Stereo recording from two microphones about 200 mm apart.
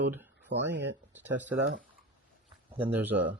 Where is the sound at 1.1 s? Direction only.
10° right (ahead or behind).